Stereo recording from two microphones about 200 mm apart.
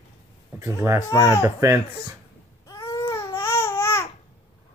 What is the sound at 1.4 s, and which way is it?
Speech, 15° right (ahead or behind).